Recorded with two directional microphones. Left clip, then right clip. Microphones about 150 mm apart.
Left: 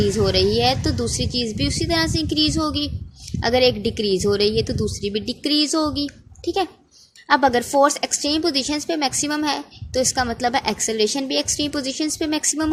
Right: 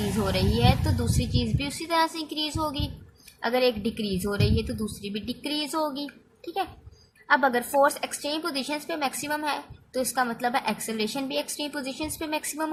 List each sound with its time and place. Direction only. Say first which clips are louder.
0.3 s speech: left 5 dB; 35° left (ahead or behind)